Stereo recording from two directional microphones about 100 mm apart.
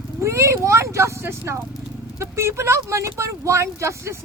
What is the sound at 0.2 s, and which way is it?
A woman's voice, 30° right (ahead or behind).